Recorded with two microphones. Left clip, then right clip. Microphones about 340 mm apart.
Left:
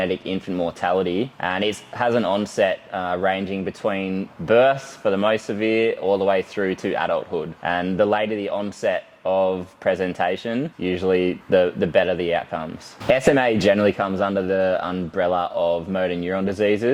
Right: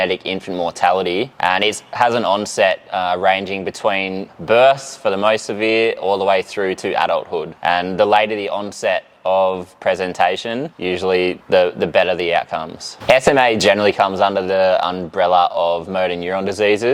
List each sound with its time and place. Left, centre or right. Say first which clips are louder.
0.0 s speech: right 5 dB; right